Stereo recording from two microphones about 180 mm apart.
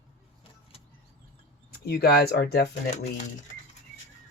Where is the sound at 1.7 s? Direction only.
60° left (ahead or behind).